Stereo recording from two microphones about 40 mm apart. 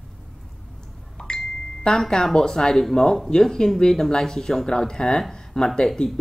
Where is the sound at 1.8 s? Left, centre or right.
Centre.